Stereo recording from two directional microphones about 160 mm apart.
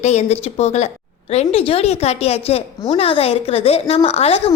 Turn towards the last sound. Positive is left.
turn(degrees=40)  # may be behind; listen again after turning